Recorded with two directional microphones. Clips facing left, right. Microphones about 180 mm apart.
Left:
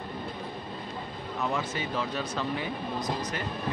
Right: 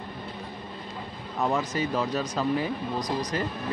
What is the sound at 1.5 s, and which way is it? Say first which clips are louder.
Speech: right 6 dB; 40° right (ahead or behind).